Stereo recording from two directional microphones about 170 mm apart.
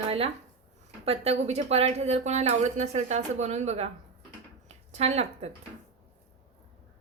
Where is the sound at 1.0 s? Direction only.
35° right (ahead or behind).